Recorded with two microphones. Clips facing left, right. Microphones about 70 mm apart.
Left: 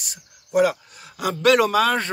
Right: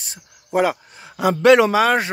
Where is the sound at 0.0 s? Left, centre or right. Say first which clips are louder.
Right 1 dB; right.